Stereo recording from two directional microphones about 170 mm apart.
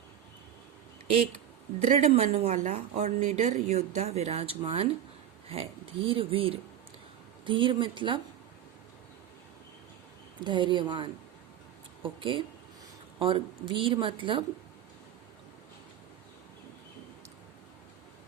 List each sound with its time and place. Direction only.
1.8 s a woman's voice: 40° right (ahead or behind)
10.4 s a woman's voice: 25° right (ahead or behind)